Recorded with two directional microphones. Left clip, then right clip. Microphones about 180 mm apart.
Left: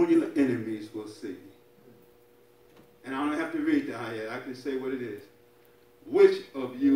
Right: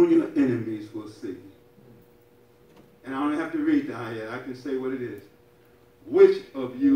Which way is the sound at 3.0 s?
40° left (ahead or behind).